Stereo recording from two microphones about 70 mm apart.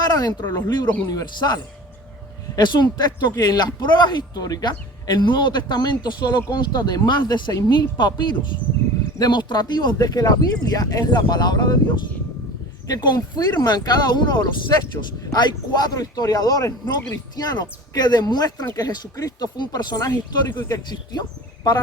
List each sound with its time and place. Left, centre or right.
0.0 s speech: left
2.6 s a man's voice: left
5.0 s a man's voice: left
12.9 s a man's voice: left
14.7 s speech: left
15.3 s speech: left
17.3 s speech: left
20.1 s speech: left
20.9 s speech: left